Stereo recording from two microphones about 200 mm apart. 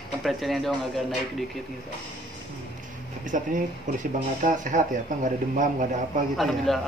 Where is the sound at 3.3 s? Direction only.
40° right (ahead or behind).